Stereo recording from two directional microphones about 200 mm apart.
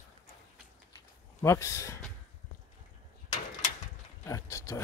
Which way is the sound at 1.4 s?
15° left (ahead or behind).